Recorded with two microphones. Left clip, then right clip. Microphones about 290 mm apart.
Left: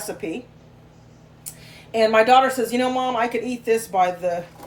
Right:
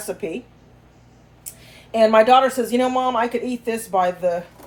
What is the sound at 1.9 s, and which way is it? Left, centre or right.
Speech, right.